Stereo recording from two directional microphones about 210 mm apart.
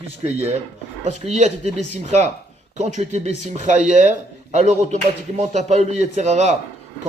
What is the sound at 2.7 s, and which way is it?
Speech, 35° right (ahead or behind).